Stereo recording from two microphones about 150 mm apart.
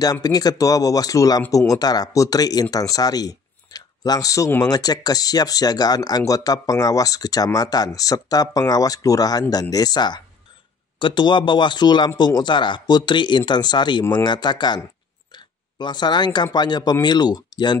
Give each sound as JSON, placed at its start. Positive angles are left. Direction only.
{"t": 0.0, "sound": "speech", "side_deg": 25}
{"t": 15.3, "sound": "oink", "side_deg": 30}
{"t": 16.5, "sound": "speech", "side_deg": 30}